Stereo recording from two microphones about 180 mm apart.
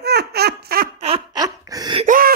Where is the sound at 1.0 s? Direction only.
35° right (ahead or behind).